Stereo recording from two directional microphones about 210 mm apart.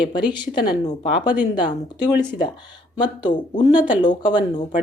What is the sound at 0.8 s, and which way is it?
Speech, 35° left (ahead or behind).